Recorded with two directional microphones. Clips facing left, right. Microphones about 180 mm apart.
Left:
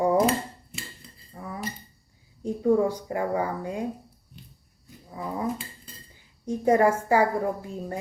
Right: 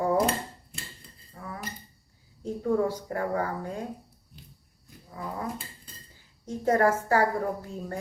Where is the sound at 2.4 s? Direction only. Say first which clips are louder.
Left 4 dB; 15° left (ahead or behind).